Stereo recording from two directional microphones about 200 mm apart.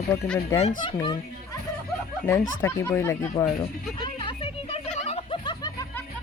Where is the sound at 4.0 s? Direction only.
25° left (ahead or behind).